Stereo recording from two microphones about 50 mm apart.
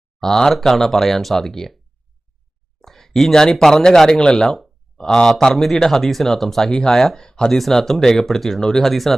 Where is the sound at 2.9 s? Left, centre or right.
Centre.